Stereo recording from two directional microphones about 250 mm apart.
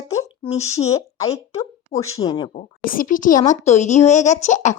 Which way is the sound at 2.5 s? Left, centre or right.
Left.